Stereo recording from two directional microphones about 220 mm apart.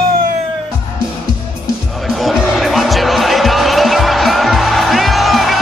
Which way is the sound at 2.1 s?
Centre (ahead or behind).